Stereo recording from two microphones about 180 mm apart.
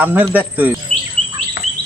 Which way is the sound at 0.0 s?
10° right (ahead or behind).